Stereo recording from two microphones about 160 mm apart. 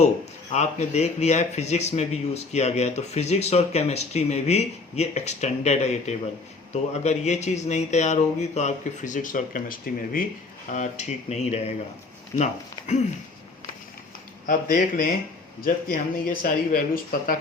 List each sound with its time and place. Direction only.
0.5 s speech: 45° left (ahead or behind); by 10.2 s 60° left (ahead or behind)
10.7 s speech: 45° left (ahead or behind)
14.4 s speech: 55° left (ahead or behind)